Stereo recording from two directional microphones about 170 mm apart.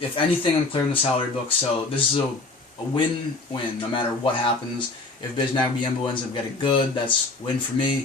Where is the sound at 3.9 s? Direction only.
30° left (ahead or behind).